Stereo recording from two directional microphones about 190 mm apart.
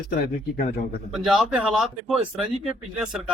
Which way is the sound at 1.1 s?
5° right (ahead or behind).